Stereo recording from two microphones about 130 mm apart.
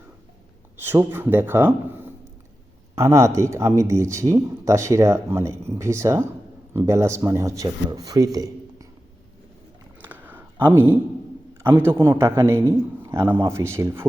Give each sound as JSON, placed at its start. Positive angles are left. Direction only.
{"t": 0.8, "sound": "speech", "side_deg": -15}
{"t": 10.0, "sound": "a sound", "side_deg": -15}
{"t": 11.6, "sound": "speech", "side_deg": -15}